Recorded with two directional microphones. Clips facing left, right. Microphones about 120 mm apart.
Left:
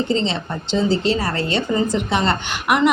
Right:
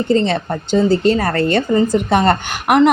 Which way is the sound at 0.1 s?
50° right (ahead or behind).